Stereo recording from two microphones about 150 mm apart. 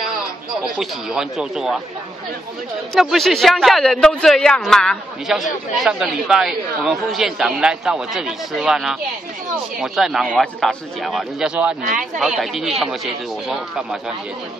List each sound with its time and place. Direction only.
0.7 s a man's voice: 5° right (ahead or behind)
2.9 s a man's voice: centre (ahead or behind)
11.8 s speech: 60° right (ahead or behind)
12.2 s a man's voice: centre (ahead or behind)